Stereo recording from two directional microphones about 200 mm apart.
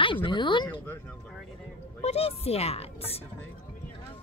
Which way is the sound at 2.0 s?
30° left (ahead or behind).